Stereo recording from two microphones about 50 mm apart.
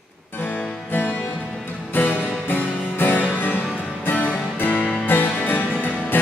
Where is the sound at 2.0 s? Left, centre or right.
Left.